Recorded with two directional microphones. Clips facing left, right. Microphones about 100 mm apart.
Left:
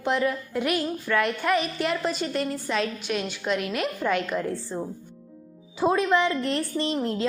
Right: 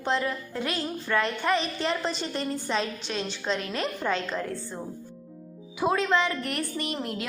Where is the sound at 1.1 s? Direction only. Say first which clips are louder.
Left 2 dB; 10° right (ahead or behind).